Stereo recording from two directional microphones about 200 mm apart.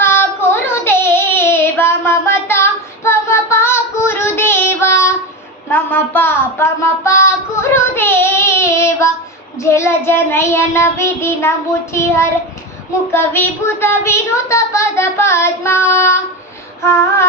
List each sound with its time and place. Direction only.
0.0 s child singing: 10° left (ahead or behind)
9.6 s a child's voice: 15° left (ahead or behind)